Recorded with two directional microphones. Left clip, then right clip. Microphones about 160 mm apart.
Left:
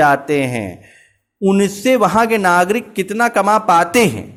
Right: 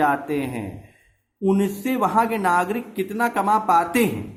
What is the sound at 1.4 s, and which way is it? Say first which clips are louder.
Speech: left 7 dB; 35° left (ahead or behind).